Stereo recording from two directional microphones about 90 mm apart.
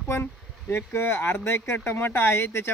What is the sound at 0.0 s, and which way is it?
Speech, 25° left (ahead or behind).